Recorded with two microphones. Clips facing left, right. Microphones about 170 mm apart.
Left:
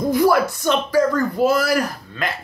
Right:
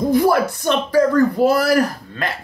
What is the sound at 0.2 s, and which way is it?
Speech, 55° right (ahead or behind).